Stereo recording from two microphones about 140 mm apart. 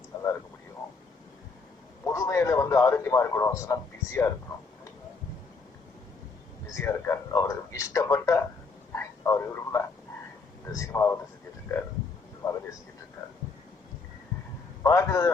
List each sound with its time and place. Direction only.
2.1 s a man's voice: 20° left (ahead or behind)
6.7 s a man's voice: 15° left (ahead or behind)
9.0 s a sound: 20° left (ahead or behind)
10.7 s a man's voice: 20° left (ahead or behind)
12.4 s a man's voice: 25° left (ahead or behind)
14.8 s a man's voice: 20° left (ahead or behind)